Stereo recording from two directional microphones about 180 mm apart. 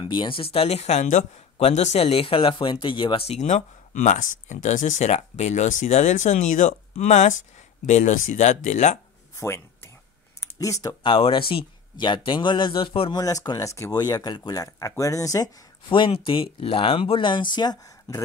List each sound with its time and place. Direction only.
0.0 s a man's voice: 30° left (ahead or behind)
9.4 s a sound: 15° left (ahead or behind)
10.4 s speech: 20° left (ahead or behind)
11.0 s speech: 30° left (ahead or behind)